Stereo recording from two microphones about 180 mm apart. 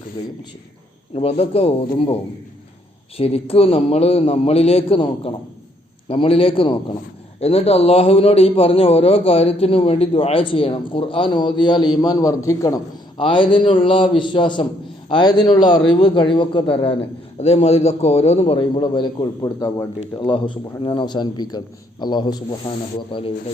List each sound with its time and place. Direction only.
1.1 s a man's voice: 35° left (ahead or behind)
3.2 s a man's voice: 35° left (ahead or behind)